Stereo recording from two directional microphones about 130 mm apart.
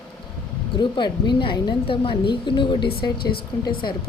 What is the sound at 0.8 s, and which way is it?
A woman's voice, 35° left (ahead or behind).